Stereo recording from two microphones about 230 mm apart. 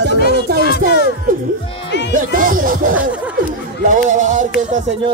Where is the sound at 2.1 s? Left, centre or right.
Right.